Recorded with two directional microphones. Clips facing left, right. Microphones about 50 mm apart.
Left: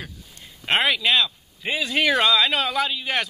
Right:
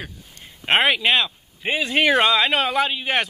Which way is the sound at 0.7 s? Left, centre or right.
Right.